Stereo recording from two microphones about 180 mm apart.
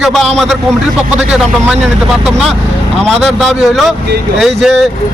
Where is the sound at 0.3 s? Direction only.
Centre (ahead or behind).